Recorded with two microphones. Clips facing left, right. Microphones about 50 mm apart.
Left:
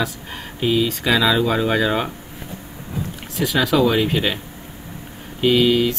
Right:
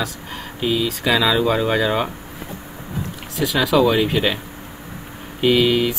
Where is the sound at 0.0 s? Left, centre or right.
Centre.